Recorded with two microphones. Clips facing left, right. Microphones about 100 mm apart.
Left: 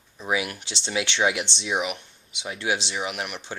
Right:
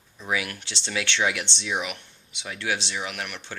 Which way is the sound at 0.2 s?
20° left (ahead or behind).